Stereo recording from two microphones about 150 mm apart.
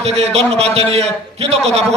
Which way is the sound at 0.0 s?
45° right (ahead or behind).